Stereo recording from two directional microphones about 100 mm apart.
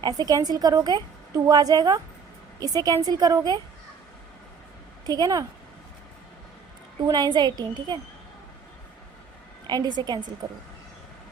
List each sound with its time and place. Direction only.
0.0 s a woman's voice: 40° right (ahead or behind)
5.0 s a woman's voice: 40° right (ahead or behind)
7.1 s speech: 45° right (ahead or behind)
9.6 s speech: 45° right (ahead or behind)